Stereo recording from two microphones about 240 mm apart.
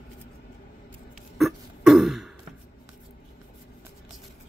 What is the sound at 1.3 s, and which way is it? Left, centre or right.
Throat clearing, centre.